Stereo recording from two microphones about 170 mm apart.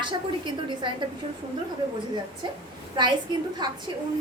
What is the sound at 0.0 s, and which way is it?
Speech, 30° right (ahead or behind).